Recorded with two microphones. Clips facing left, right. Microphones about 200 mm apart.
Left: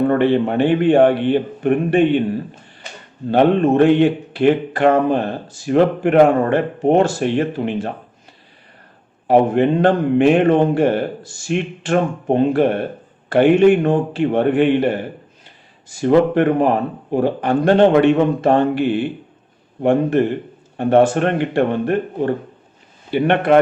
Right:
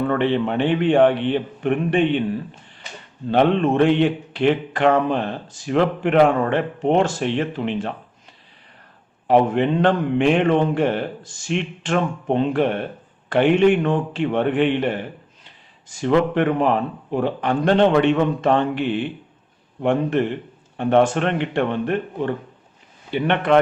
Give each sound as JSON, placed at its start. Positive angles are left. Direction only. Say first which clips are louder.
{"t": 0.0, "sound": "a man's voice", "louder": "left 5 dB", "side_deg": 45}
{"t": 9.4, "sound": "a man's voice", "louder": "left 4 dB", "side_deg": 40}
{"t": 11.2, "sound": "speech", "louder": "left 4 dB", "side_deg": 10}
{"t": 11.9, "sound": "a man's voice", "louder": "left 4 dB", "side_deg": 45}
{"t": 19.8, "sound": "a man's voice", "louder": "left 4 dB", "side_deg": 40}